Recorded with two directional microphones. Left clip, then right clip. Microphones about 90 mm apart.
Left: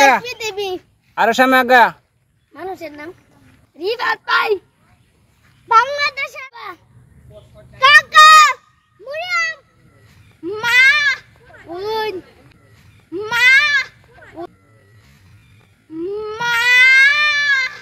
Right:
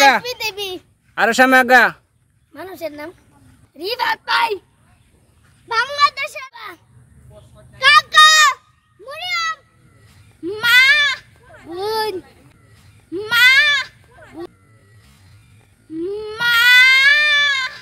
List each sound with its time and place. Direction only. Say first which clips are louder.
0.2 s babbling: left 1 dB; 35° right (ahead or behind)
1.1 s speech: even; 60° right (ahead or behind)
2.5 s a woman's voice: even; 40° right (ahead or behind)
5.7 s speech: left 3 dB; 25° right (ahead or behind)
7.8 s a child's voice: left 2 dB; 25° right (ahead or behind)
10.4 s goat: even; 35° right (ahead or behind)
11.7 s speech: even; 25° right (ahead or behind)
13.1 s goat: even; 35° right (ahead or behind)
14.1 s a sound: left 1 dB; centre (ahead or behind)
16.0 s baby cry: even; 30° right (ahead or behind)